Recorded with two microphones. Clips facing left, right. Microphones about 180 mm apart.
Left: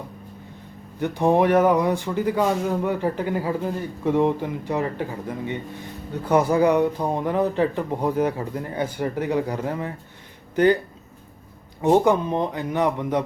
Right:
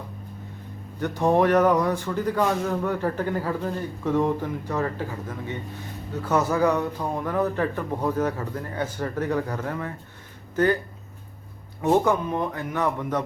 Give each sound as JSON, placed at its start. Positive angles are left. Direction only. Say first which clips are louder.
{"t": 0.9, "sound": "speech", "louder": "left 2 dB", "side_deg": 15}
{"t": 6.2, "sound": "speech", "louder": "left 4 dB", "side_deg": 15}
{"t": 11.8, "sound": "speech", "louder": "left 3 dB", "side_deg": 25}